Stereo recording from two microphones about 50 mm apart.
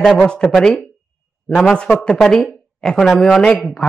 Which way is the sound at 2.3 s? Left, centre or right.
Centre.